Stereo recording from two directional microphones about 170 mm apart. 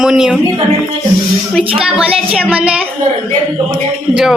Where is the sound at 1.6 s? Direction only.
35° right (ahead or behind).